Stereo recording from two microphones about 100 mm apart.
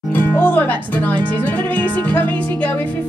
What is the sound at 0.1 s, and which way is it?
Speech, 20° left (ahead or behind).